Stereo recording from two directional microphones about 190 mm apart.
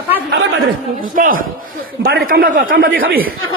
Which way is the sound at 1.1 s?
45° right (ahead or behind).